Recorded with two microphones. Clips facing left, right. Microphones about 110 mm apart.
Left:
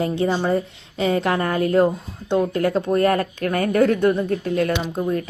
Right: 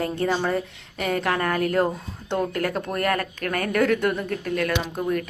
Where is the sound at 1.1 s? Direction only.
25° left (ahead or behind).